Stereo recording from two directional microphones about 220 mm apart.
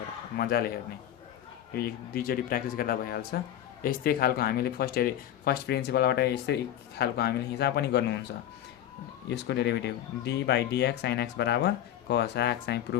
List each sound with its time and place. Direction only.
0.3 s speech: 45° left (ahead or behind)
1.7 s speech: 45° left (ahead or behind)
9.3 s speech: 50° left (ahead or behind)